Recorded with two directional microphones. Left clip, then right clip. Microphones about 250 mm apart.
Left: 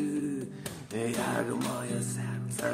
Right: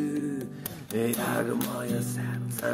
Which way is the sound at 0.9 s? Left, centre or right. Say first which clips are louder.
Right 3 dB; centre.